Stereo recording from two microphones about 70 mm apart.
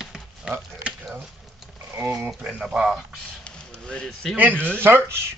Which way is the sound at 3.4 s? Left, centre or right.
Centre.